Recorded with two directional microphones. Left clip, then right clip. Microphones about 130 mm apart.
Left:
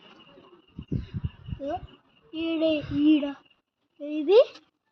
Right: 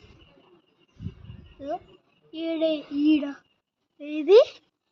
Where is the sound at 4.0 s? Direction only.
35° right (ahead or behind).